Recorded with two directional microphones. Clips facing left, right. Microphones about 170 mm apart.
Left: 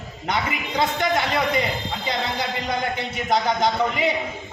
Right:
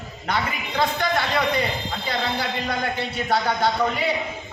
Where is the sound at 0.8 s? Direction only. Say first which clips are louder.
Left 1 dB; 20° left (ahead or behind).